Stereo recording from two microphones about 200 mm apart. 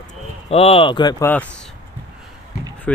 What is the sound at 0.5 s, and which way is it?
Speech, 30° left (ahead or behind).